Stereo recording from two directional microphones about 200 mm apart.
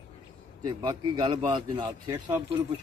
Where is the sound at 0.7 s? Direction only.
25° right (ahead or behind).